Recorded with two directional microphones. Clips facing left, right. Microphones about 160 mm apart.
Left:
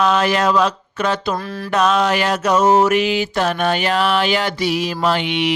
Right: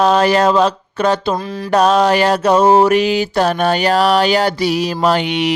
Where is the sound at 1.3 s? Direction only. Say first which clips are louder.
Right 3 dB; 15° right (ahead or behind).